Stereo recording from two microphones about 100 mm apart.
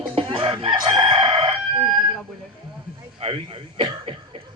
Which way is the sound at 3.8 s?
60° right (ahead or behind).